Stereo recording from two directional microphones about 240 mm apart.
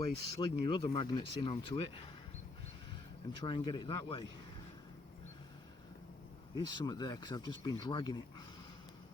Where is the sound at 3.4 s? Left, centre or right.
Centre.